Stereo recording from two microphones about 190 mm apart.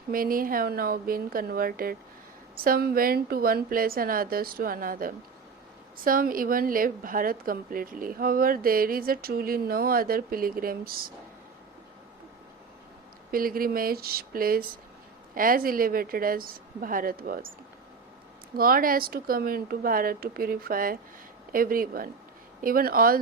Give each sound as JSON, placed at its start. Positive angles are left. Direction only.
{"t": 0.1, "sound": "a woman's voice", "side_deg": -50}
{"t": 13.3, "sound": "a woman's voice", "side_deg": -50}
{"t": 18.5, "sound": "a woman's voice", "side_deg": -50}